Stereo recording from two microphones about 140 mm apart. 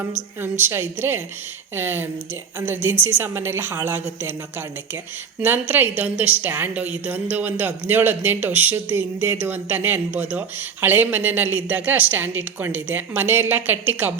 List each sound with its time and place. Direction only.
0.4 s a woman's voice: 15° right (ahead or behind)
5.4 s a woman's voice: 15° right (ahead or behind)